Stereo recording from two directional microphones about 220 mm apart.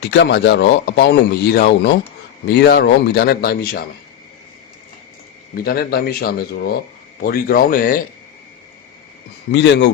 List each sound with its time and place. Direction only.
0.1 s speech: 50° left (ahead or behind)
5.5 s speech: 40° left (ahead or behind)
9.5 s speech: 50° left (ahead or behind)